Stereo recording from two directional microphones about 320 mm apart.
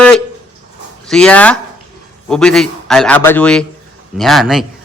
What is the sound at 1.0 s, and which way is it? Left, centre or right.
A man's voice, centre.